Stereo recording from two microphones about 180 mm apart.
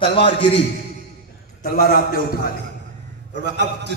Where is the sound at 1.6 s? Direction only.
50° left (ahead or behind).